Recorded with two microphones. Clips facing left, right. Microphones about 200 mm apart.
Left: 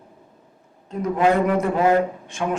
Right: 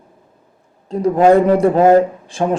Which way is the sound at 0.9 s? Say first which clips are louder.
Right 8 dB; 35° right (ahead or behind).